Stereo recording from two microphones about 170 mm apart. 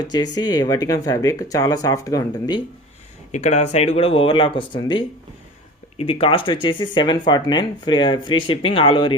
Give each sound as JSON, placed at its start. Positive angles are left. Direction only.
{"t": 0.1, "sound": "speech", "side_deg": 25}
{"t": 3.3, "sound": "speech", "side_deg": 45}